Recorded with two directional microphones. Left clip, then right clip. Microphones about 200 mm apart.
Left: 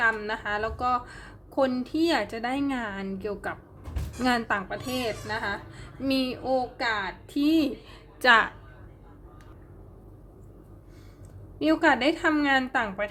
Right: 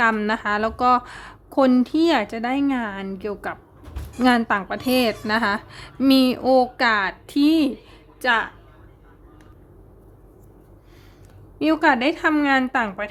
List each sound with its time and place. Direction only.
0.0 s a woman's voice: 25° right (ahead or behind)
8.2 s a woman's voice: centre (ahead or behind)
11.6 s a woman's voice: 15° right (ahead or behind)